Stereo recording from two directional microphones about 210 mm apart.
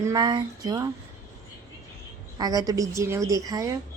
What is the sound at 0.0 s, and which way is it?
Speech, 20° right (ahead or behind).